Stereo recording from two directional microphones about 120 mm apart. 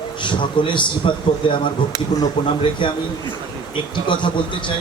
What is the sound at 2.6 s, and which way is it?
Speech, 45° left (ahead or behind).